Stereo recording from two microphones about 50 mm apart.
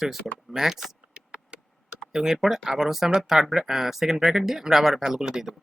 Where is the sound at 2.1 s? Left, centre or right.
Centre.